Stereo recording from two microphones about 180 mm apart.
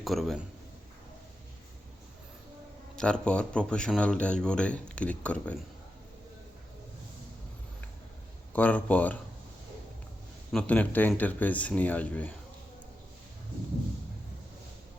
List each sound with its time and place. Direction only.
0.0 s speech: centre (ahead or behind)
2.9 s speech: 5° left (ahead or behind)
8.5 s speech: 10° left (ahead or behind)
10.5 s speech: 5° left (ahead or behind)